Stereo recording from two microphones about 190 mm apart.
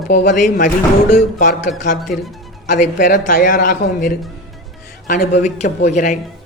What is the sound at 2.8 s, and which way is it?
A man's voice, 45° left (ahead or behind).